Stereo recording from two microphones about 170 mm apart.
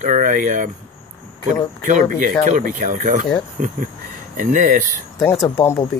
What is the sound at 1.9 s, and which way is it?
Speech, 50° right (ahead or behind).